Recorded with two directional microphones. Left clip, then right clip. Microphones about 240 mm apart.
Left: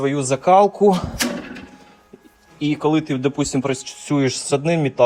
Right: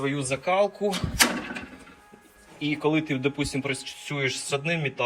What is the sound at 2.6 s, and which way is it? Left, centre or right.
A man's voice, centre.